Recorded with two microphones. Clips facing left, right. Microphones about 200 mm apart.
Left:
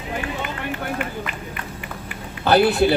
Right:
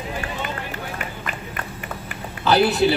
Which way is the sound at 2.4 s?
55° left (ahead or behind).